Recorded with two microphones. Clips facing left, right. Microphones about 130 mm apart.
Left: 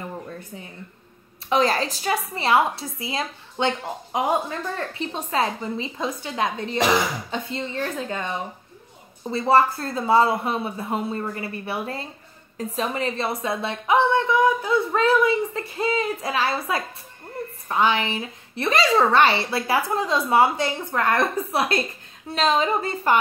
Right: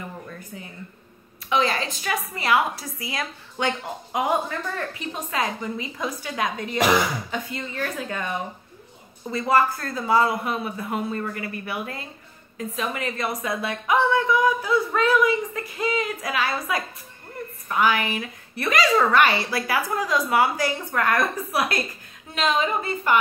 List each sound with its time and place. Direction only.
1.5 s a woman's voice: 40° left (ahead or behind)